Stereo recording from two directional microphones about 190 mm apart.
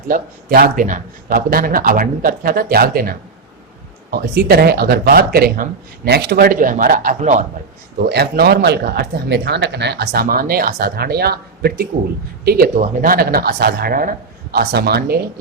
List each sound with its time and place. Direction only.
0.1 s speech: 50° right (ahead or behind)
8.1 s speech: 60° right (ahead or behind)